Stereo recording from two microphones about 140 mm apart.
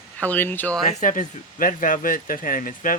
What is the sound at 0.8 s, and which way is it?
Speech, 70° left (ahead or behind).